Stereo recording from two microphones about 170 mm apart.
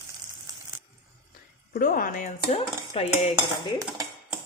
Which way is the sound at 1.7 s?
55° left (ahead or behind).